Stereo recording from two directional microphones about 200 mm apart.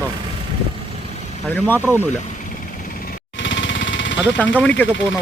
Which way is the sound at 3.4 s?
65° left (ahead or behind).